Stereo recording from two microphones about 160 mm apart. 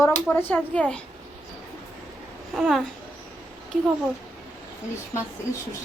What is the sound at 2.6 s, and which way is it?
Speech, centre (ahead or behind).